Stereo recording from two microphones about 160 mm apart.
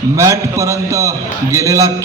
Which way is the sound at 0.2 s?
20° right (ahead or behind).